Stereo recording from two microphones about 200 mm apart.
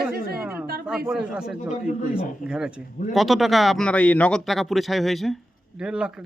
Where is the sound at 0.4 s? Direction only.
10° right (ahead or behind).